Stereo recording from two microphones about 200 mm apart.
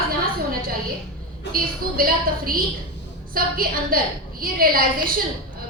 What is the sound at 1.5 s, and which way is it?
A woman's voice, 45° right (ahead or behind).